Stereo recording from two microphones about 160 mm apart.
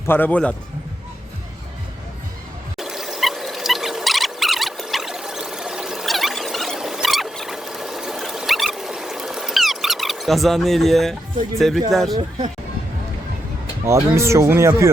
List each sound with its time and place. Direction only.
0.1 s a man's voice: 10° left (ahead or behind)
2.7 s rodents: centre (ahead or behind)
11.9 s speech: centre (ahead or behind)
13.8 s speech: 15° right (ahead or behind)